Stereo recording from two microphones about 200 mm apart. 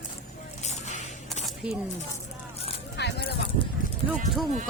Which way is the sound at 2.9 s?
55° left (ahead or behind).